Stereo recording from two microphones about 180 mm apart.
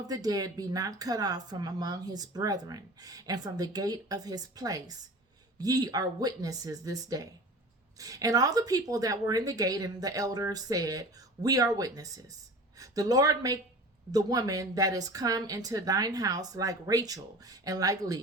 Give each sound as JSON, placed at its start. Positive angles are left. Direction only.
{"t": 0.0, "sound": "speech", "side_deg": -20}